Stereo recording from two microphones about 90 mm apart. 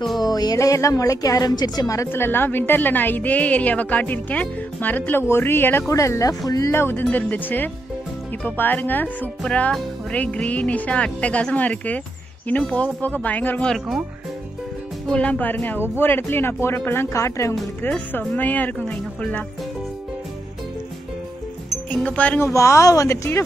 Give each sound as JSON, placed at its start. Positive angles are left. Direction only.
{"t": 0.2, "sound": "a woman's voice", "side_deg": 45}
{"t": 2.0, "sound": "a woman's voice", "side_deg": 25}
{"t": 5.9, "sound": "a woman's voice", "side_deg": 35}
{"t": 6.7, "sound": "a woman's voice", "side_deg": 25}
{"t": 9.4, "sound": "speech", "side_deg": 10}
{"t": 13.7, "sound": "speech", "side_deg": 0}
{"t": 15.0, "sound": "a woman's voice", "side_deg": 10}
{"t": 17.8, "sound": "a woman's voice", "side_deg": 20}
{"t": 21.9, "sound": "speech", "side_deg": 15}
{"t": 22.4, "sound": "a woman's voice", "side_deg": 35}